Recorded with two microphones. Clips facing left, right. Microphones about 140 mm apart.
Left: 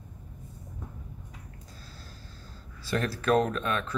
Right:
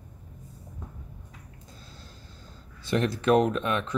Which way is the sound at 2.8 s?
20° right (ahead or behind).